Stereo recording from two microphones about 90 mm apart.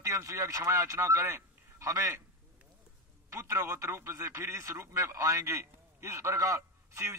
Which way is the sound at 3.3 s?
35° right (ahead or behind).